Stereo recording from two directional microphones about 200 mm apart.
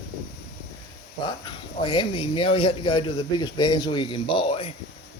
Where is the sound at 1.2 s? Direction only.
20° left (ahead or behind).